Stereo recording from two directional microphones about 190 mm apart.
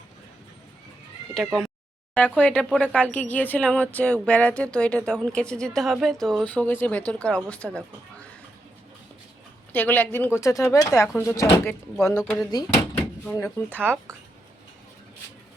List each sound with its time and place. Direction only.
2.1 s speech: 10° left (ahead or behind)
9.7 s speech: 10° left (ahead or behind)